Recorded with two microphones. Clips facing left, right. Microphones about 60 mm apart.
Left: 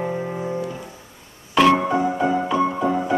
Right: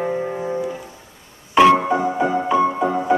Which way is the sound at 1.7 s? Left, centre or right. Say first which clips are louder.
Right 2 dB; centre.